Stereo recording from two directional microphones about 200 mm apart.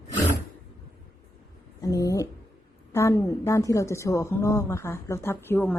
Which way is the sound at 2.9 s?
15° left (ahead or behind).